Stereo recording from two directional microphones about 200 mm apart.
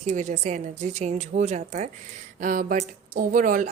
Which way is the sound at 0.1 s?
35° right (ahead or behind).